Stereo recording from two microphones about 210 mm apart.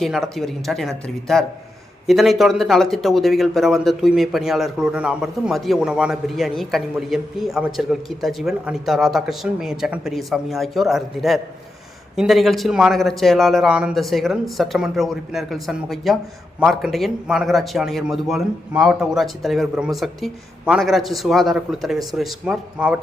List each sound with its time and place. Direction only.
0.0 s speech: centre (ahead or behind)